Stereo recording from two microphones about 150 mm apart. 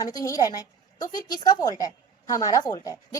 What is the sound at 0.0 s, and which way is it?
A woman's voice, 25° left (ahead or behind).